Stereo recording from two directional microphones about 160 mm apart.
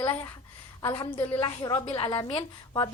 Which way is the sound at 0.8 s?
15° left (ahead or behind).